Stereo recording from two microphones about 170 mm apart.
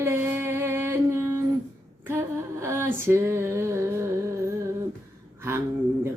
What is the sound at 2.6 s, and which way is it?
Music, 15° right (ahead or behind).